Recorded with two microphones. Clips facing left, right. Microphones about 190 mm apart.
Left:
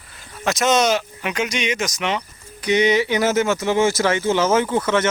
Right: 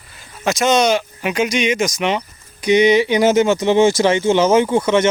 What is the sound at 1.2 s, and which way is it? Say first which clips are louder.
Speech: right 5 dB; 10° right (ahead or behind).